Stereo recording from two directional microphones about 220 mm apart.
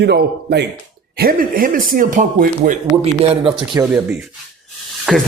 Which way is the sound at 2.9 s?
25° right (ahead or behind).